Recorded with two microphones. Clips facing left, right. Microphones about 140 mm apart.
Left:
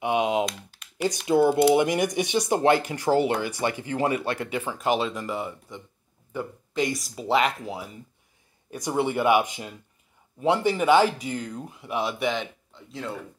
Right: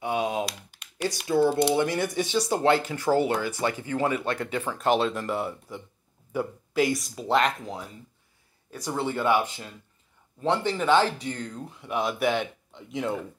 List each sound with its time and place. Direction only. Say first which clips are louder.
0.0 s typing: left 4 dB; 20° left (ahead or behind)
1.2 s speech: left 3 dB; 20° left (ahead or behind)
8.6 s speech: left 4 dB; 15° left (ahead or behind)
12.3 s speech: right 2 dB; 15° right (ahead or behind)